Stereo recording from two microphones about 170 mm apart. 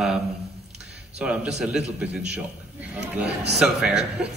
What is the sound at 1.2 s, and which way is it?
A man's voice, 5° right (ahead or behind).